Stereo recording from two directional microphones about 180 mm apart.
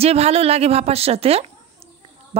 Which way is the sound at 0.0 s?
35° right (ahead or behind).